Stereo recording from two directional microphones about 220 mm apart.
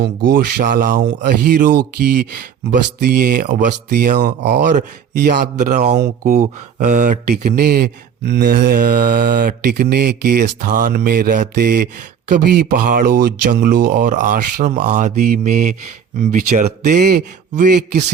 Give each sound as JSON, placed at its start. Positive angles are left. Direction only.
{"t": 0.3, "sound": "speech", "side_deg": -40}
{"t": 1.0, "sound": "speech", "side_deg": -50}
{"t": 3.0, "sound": "speech", "side_deg": -45}
{"t": 14.1, "sound": "speech", "side_deg": -35}